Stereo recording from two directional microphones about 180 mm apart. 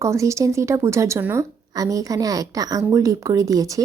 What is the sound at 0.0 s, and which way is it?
Speech, 15° right (ahead or behind).